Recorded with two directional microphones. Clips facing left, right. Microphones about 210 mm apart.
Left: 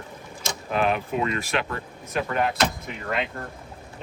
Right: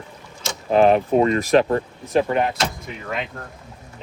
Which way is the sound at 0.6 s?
35° right (ahead or behind).